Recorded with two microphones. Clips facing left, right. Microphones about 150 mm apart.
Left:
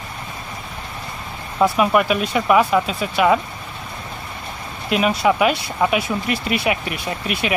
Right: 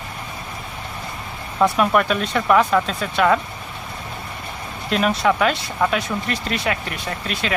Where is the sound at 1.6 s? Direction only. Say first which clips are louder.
Left 1 dB; 5° left (ahead or behind).